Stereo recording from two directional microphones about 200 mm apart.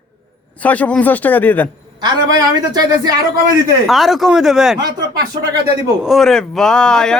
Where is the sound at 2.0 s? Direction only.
20° right (ahead or behind).